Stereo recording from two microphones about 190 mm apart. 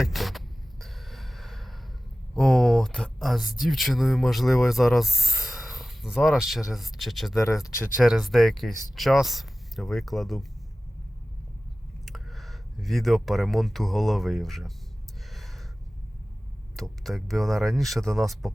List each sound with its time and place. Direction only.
0.0 s a sound: centre (ahead or behind)
2.3 s speech: 5° left (ahead or behind)
7.3 s speech: 15° left (ahead or behind)
7.6 s speech: centre (ahead or behind)
12.0 s speech: centre (ahead or behind)
15.3 s a sound: centre (ahead or behind)
16.7 s speech: centre (ahead or behind)